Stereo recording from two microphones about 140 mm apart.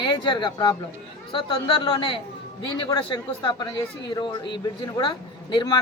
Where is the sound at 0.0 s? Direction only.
35° left (ahead or behind).